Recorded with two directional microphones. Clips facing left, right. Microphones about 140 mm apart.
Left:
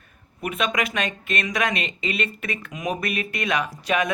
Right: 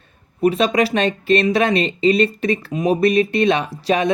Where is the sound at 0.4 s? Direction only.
35° right (ahead or behind).